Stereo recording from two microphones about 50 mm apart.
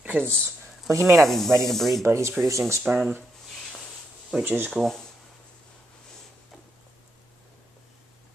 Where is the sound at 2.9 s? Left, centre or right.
Right.